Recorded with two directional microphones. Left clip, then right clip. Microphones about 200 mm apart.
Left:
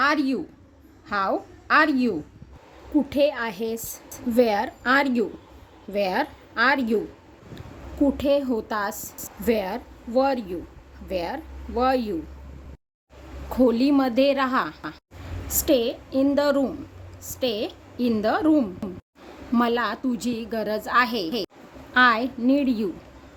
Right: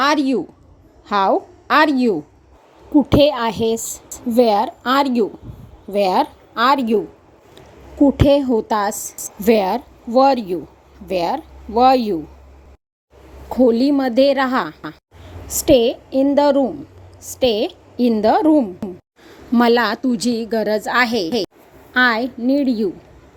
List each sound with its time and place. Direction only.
0.0 s a woman's voice: 30° right (ahead or behind)
8.0 s a woman's voice: 30° right (ahead or behind)
13.5 s a woman's voice: 20° right (ahead or behind)